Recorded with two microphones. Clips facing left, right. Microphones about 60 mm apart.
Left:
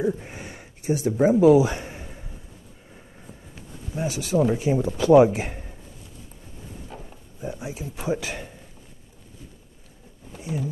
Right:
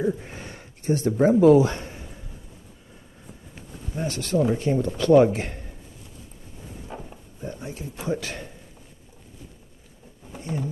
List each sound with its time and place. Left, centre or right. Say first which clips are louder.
0.0 s speech: even; centre
0.3 s a sound: even; centre
3.9 s a man's voice: left 1 dB; centre
6.9 s pig: right 5 dB; right
7.3 s speech: left 2 dB; centre
10.4 s speech: even; centre